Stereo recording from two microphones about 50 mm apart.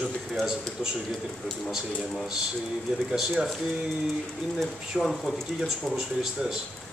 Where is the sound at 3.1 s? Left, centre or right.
Centre.